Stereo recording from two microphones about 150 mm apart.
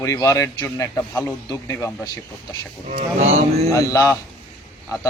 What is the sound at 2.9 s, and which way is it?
Speech, 50° right (ahead or behind).